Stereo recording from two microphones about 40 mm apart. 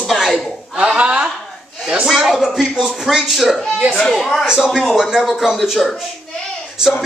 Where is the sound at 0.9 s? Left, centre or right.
Right.